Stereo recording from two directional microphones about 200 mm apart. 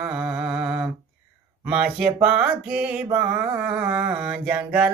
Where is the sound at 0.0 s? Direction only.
5° right (ahead or behind).